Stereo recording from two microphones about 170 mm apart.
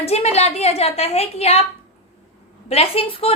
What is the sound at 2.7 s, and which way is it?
Speech, 35° left (ahead or behind).